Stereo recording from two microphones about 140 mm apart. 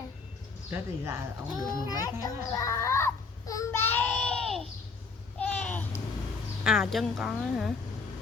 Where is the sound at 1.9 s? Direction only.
25° left (ahead or behind).